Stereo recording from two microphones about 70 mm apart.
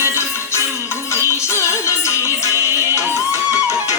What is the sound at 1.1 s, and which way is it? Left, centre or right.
Music, left.